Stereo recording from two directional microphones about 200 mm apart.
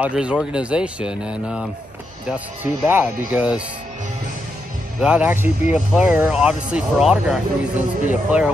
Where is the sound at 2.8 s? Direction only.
10° right (ahead or behind).